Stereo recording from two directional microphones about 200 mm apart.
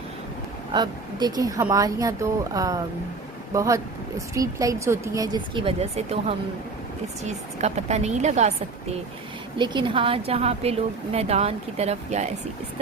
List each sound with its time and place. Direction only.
0.7 s a woman's voice: 20° right (ahead or behind)
9.6 s a woman's voice: 25° right (ahead or behind)